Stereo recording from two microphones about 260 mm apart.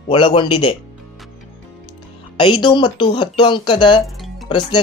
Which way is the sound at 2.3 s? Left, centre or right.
Centre.